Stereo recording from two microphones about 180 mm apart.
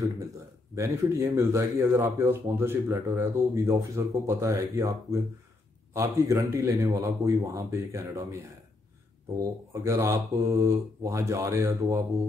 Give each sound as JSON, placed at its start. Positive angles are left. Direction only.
{"t": 0.7, "sound": "speech", "side_deg": -15}
{"t": 9.4, "sound": "speech", "side_deg": -15}